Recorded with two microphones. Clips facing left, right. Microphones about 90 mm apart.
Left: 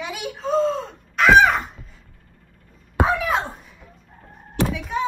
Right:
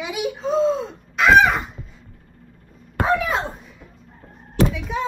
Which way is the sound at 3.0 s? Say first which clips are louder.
Even; centre (ahead or behind).